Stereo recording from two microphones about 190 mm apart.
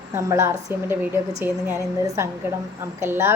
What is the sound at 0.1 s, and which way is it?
A woman's voice, 15° right (ahead or behind).